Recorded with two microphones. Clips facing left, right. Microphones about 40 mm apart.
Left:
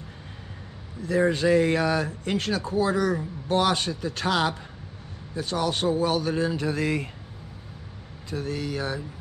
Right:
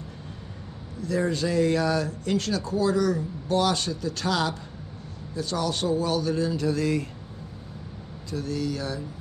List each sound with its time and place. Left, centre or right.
1.0 s speech: left
8.3 s speech: left